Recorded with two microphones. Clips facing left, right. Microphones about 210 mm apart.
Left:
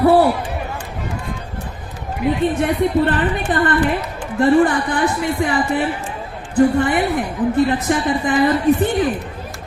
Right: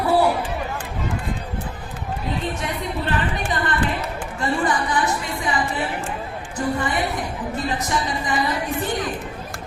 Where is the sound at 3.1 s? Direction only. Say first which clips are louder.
Left 6 dB; 55° left (ahead or behind).